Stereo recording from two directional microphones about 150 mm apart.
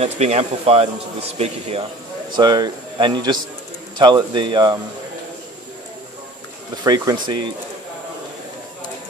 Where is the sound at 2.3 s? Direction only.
30° right (ahead or behind).